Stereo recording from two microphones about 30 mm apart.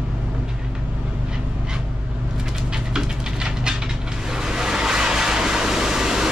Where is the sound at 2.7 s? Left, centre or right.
Right.